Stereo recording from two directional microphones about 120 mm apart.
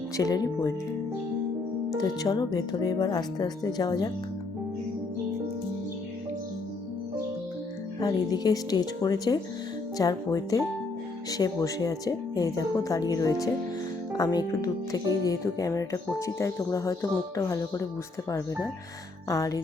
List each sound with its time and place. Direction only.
0.2 s speech: 30° left (ahead or behind)
2.2 s speech: 35° left (ahead or behind)
7.9 s speech: 35° left (ahead or behind)